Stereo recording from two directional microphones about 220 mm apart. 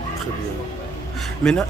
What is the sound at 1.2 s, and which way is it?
Speech, 5° left (ahead or behind).